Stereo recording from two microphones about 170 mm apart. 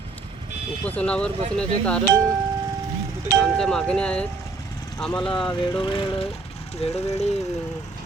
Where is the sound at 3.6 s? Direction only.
5° left (ahead or behind).